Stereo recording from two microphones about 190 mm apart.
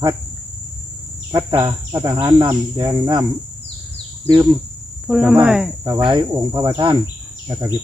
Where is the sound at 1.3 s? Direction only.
15° right (ahead or behind).